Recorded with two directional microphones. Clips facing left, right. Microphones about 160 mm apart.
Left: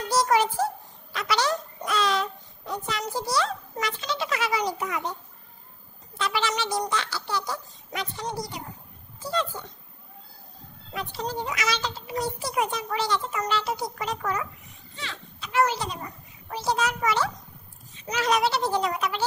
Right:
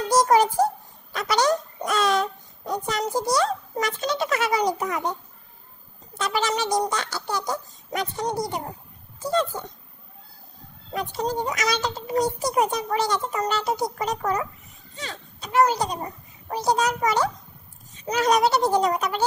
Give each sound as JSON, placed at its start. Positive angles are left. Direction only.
{"t": 0.1, "sound": "a sound", "side_deg": -40}
{"t": 6.1, "sound": "a woman's voice", "side_deg": -45}
{"t": 10.9, "sound": "a woman's voice", "side_deg": -45}